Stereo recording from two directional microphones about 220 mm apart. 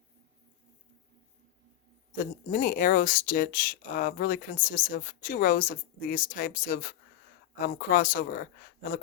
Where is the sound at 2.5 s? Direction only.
40° left (ahead or behind).